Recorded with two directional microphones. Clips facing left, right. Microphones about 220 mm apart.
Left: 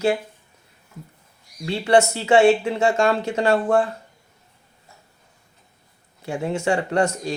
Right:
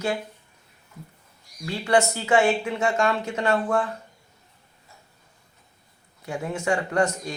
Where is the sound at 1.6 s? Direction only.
25° left (ahead or behind).